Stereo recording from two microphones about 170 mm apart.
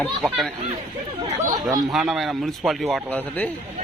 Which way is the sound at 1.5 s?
25° right (ahead or behind).